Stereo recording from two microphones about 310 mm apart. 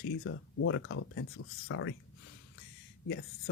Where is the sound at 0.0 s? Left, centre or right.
Left.